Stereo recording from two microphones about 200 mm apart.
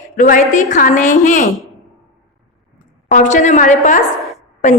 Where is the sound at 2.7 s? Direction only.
40° left (ahead or behind).